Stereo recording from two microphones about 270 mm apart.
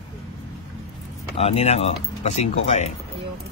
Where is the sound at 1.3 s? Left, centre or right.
Left.